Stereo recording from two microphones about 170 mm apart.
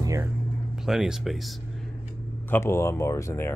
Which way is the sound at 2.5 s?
15° left (ahead or behind).